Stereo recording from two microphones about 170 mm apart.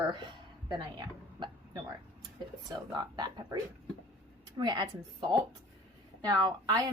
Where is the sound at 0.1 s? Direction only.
25° right (ahead or behind).